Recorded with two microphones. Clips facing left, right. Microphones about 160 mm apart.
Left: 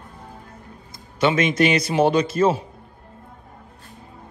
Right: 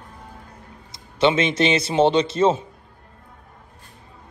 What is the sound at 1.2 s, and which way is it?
A man's voice, 25° right (ahead or behind).